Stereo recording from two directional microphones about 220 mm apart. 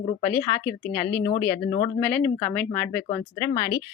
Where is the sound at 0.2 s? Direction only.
10° left (ahead or behind).